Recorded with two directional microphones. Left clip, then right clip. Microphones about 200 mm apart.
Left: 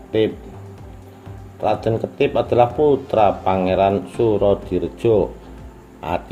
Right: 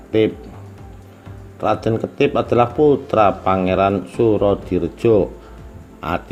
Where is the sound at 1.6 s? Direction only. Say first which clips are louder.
Right 1 dB; 20° right (ahead or behind).